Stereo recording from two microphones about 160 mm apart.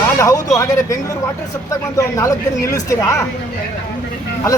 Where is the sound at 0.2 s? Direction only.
20° left (ahead or behind).